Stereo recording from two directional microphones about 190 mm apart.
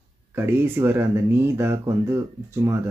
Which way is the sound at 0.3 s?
10° right (ahead or behind).